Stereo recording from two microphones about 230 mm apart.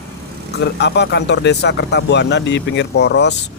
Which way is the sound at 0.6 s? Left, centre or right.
Left.